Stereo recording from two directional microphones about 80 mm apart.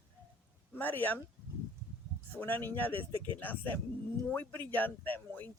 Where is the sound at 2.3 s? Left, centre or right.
Left.